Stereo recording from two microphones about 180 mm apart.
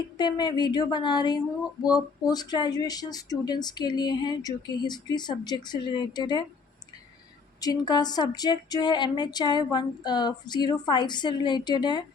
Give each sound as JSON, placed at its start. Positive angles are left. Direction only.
{"t": 0.2, "sound": "speech", "side_deg": 25}
{"t": 7.6, "sound": "speech", "side_deg": 20}